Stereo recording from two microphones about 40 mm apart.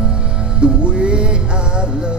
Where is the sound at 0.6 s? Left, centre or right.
Right.